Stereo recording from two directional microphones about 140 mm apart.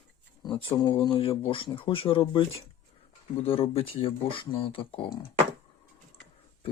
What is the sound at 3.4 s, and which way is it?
Speech, 40° left (ahead or behind).